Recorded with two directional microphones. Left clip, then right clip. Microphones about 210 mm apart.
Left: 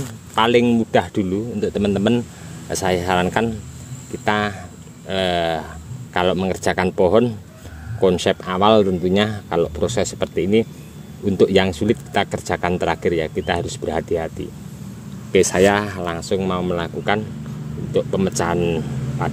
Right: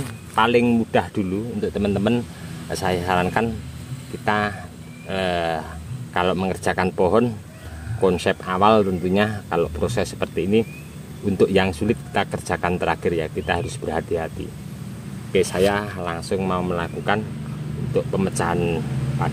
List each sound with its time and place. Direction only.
0.0 s speech: 40° left (ahead or behind)
15.3 s speech: 50° left (ahead or behind)